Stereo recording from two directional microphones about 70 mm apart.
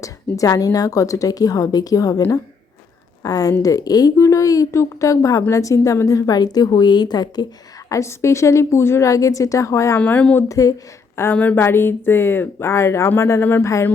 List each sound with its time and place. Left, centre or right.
0.0 s a woman's voice: left
3.2 s a woman's voice: left
4.2 s a woman's voice: left
7.9 s a woman's voice: left
9.0 s a woman's voice: left
10.0 s speech: centre
10.5 s a woman's voice: left
11.3 s a woman's voice: left